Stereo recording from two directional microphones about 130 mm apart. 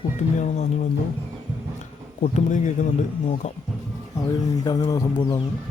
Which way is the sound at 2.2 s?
65° left (ahead or behind).